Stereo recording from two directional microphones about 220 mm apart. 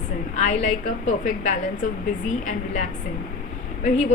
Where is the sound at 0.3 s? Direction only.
30° left (ahead or behind).